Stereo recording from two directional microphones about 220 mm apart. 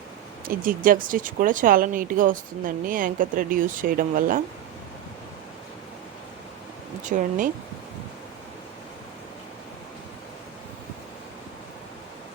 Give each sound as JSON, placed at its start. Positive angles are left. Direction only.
{"t": 0.4, "sound": "speech", "side_deg": -40}
{"t": 7.0, "sound": "speech", "side_deg": -35}